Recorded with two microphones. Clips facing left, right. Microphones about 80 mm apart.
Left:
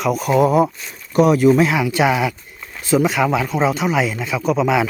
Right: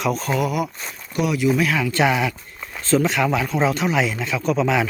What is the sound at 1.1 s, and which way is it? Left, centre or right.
Speech, left.